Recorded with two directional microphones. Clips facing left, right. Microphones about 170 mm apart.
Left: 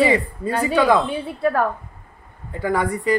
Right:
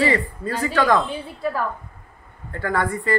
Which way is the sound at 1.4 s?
60° left (ahead or behind).